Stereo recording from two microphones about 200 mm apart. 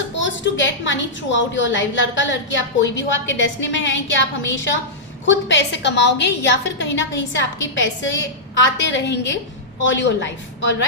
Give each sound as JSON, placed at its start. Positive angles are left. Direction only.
{"t": 0.2, "sound": "a woman's voice", "side_deg": 65}